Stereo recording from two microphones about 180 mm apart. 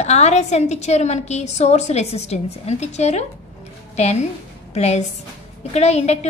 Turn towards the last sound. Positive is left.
turn(degrees=35)  # may be behind; listen again after turning